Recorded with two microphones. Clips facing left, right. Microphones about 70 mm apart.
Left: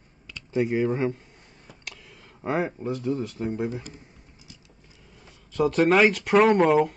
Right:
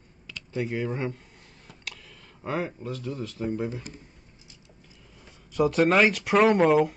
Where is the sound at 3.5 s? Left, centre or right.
Centre.